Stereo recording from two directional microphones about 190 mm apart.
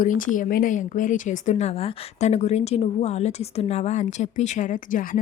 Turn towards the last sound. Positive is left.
turn(degrees=45)  # may be behind; listen again after turning